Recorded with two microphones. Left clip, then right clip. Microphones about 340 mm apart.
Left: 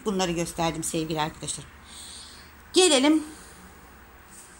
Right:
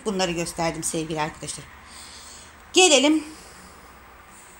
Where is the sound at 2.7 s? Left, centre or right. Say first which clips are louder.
Right 3 dB; centre.